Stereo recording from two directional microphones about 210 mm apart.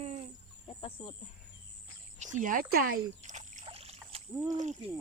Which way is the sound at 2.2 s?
35° right (ahead or behind).